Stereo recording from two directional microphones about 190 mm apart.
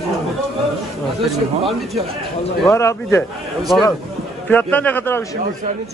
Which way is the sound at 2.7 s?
15° left (ahead or behind).